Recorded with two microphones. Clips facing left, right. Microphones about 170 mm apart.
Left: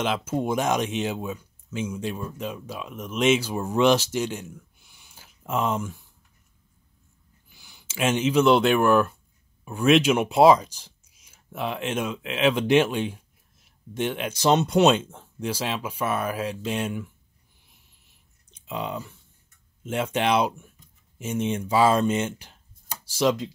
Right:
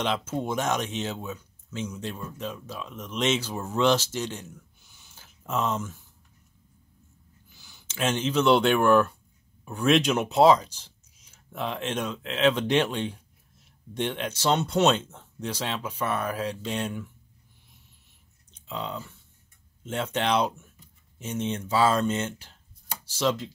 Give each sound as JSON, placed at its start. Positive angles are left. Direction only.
{"t": 0.0, "sound": "speech", "side_deg": 5}
{"t": 4.9, "sound": "a sound", "side_deg": 10}
{"t": 7.5, "sound": "speech", "side_deg": 15}
{"t": 18.5, "sound": "speech", "side_deg": 15}